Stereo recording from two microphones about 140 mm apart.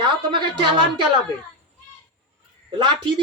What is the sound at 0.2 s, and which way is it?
Speech, 35° right (ahead or behind).